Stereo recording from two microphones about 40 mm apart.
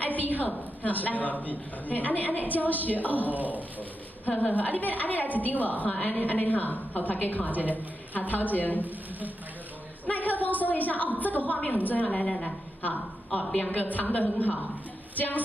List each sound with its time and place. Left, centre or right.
0.0 s a sound: left
0.8 s a woman's voice: left
3.3 s speech: right
4.3 s a woman's voice: left
10.0 s a woman's voice: left
12.1 s a woman's voice: left
13.7 s a woman's voice: left